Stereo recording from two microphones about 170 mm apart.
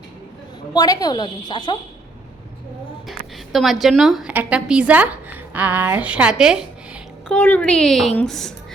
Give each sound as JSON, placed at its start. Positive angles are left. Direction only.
{"t": 0.7, "sound": "a woman's voice", "side_deg": 25}
{"t": 3.1, "sound": "a woman's voice", "side_deg": 0}
{"t": 7.3, "sound": "a woman's voice", "side_deg": 10}